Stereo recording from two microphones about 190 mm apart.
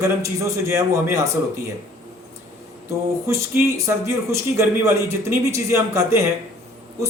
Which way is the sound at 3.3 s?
15° right (ahead or behind).